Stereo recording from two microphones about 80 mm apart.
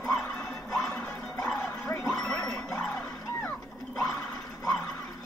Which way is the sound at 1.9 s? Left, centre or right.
Left.